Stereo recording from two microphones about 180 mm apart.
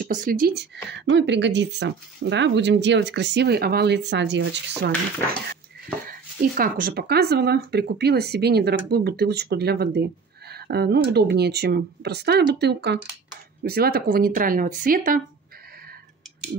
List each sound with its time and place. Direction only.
0.0 s speech: 50° right (ahead or behind)
0.8 s speech: 75° right (ahead or behind)
6.0 s speech: 55° right (ahead or behind)